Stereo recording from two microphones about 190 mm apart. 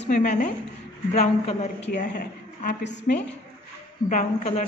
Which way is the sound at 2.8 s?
65° left (ahead or behind).